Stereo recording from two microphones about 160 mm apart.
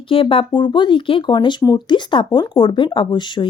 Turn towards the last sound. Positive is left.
turn(degrees=30)  # may be behind; listen again after turning